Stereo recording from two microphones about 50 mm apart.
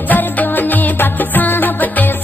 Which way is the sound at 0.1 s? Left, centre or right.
Left.